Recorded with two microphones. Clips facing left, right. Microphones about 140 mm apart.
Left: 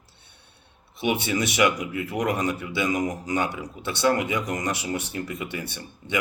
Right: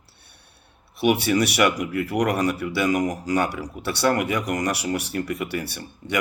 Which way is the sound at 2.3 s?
20° left (ahead or behind).